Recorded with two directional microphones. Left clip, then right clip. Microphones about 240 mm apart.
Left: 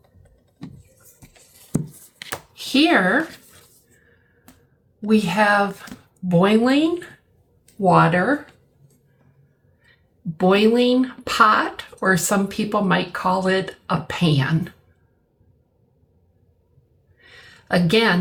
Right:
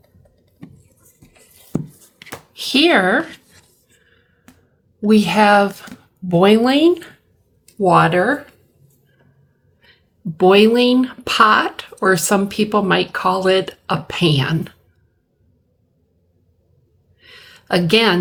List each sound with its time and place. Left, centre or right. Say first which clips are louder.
2.5 s speech: right 3 dB; right
4.9 s speech: right 5 dB; right
10.3 s speech: right 5 dB; right
17.2 s a sound: right 3 dB; right